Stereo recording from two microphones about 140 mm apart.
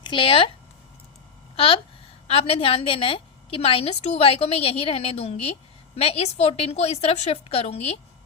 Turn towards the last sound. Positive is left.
turn(degrees=45)  # may be behind; listen again after turning